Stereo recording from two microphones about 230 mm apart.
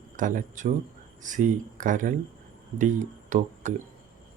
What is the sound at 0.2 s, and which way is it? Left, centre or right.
Speech, right.